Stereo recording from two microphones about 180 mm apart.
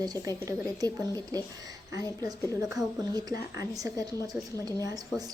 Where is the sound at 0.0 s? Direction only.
20° right (ahead or behind).